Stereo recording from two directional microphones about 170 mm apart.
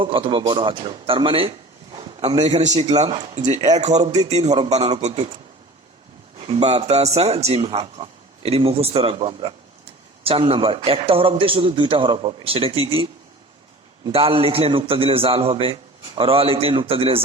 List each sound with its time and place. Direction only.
0.0 s a man's voice: 30° right (ahead or behind)
6.4 s a man's voice: 40° right (ahead or behind)